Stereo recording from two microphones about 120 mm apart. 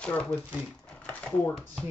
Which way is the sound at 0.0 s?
10° left (ahead or behind).